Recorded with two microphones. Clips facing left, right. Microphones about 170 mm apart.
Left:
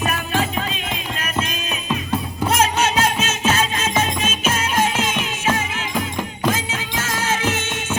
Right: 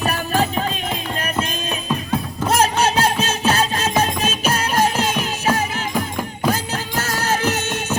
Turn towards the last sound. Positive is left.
turn(degrees=-40)  # may be behind; listen again after turning